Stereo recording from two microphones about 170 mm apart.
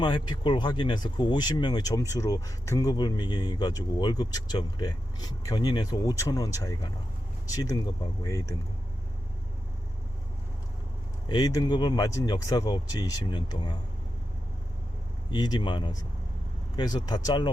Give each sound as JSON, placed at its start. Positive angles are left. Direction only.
{"t": 0.0, "sound": "speech", "side_deg": 25}
{"t": 11.3, "sound": "speech", "side_deg": 25}
{"t": 15.3, "sound": "speech", "side_deg": 25}